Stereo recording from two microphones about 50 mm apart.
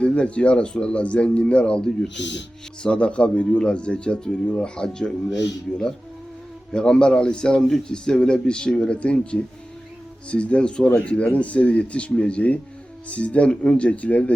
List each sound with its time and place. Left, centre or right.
0.0 s speech: left
6.7 s speech: centre